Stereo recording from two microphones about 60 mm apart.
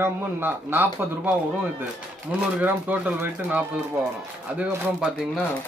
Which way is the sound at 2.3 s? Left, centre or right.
Right.